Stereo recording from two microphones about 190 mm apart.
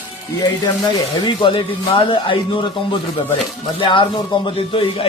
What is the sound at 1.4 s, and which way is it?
Speech, 25° left (ahead or behind).